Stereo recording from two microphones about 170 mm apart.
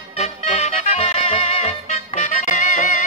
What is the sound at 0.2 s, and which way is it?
Music, 40° left (ahead or behind).